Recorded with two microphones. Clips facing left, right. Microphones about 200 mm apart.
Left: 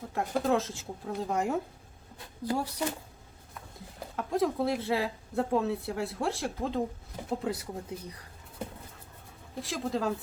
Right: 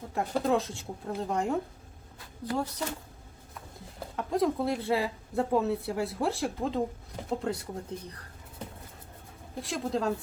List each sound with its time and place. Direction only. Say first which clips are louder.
0.1 s speech: right 1 dB; centre (ahead or behind)
2.8 s speech: left 2 dB; 20° left (ahead or behind)
4.1 s speech: right 1 dB; centre (ahead or behind)
9.6 s speech: right 1 dB; centre (ahead or behind)